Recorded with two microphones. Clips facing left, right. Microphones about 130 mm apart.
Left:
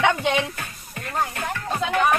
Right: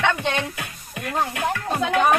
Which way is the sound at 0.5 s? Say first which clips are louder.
Right 2 dB; 10° right (ahead or behind).